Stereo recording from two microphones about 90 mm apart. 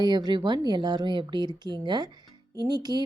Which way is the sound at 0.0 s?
55° right (ahead or behind).